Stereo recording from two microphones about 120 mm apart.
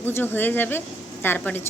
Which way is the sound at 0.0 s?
20° left (ahead or behind).